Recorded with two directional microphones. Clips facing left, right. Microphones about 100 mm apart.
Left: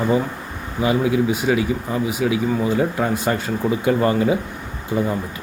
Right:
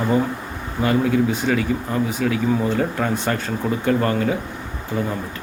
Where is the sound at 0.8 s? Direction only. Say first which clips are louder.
Even; 10° left (ahead or behind).